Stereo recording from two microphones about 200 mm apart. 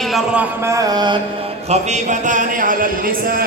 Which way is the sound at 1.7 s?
35° right (ahead or behind).